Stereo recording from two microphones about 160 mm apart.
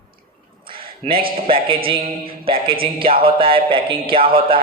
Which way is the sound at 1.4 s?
35° right (ahead or behind).